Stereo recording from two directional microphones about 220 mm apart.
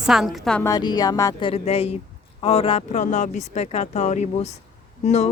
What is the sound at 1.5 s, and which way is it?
Speech, 25° left (ahead or behind).